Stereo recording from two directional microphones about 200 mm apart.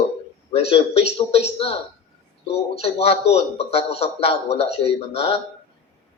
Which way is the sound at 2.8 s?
30° left (ahead or behind).